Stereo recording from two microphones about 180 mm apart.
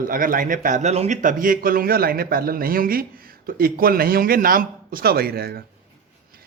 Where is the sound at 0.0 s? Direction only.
50° right (ahead or behind).